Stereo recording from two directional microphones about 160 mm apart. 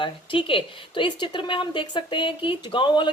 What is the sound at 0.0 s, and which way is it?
Speech, 30° left (ahead or behind).